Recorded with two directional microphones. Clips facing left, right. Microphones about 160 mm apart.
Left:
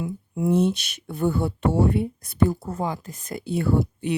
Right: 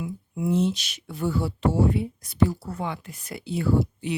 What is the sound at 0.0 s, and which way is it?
Speech, 50° left (ahead or behind).